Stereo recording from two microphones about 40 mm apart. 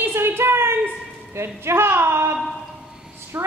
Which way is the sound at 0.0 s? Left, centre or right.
Right.